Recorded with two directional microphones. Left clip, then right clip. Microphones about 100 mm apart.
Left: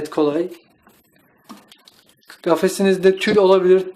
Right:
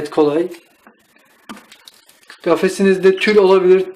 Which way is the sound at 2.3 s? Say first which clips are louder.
Right 2 dB; 25° left (ahead or behind).